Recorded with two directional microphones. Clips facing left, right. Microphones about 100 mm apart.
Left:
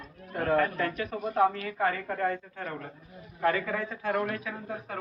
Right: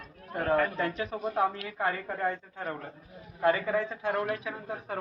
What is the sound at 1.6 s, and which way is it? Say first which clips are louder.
A woman's voice: left 2 dB; 15° right (ahead or behind).